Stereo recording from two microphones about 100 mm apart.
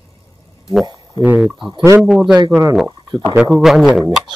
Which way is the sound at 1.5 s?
55° right (ahead or behind).